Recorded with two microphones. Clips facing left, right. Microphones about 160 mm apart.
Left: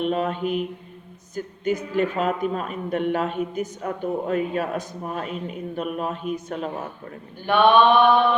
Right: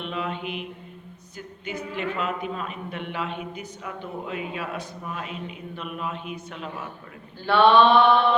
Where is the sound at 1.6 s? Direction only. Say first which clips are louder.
Left 7 dB; 40° left (ahead or behind).